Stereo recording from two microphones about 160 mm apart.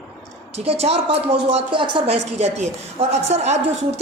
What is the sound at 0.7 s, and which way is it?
A woman's voice, 40° right (ahead or behind).